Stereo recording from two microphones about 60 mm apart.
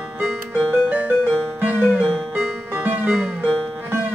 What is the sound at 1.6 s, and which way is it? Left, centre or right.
Music, right.